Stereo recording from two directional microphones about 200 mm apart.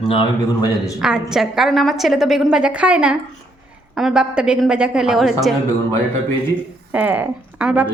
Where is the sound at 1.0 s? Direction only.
5° right (ahead or behind).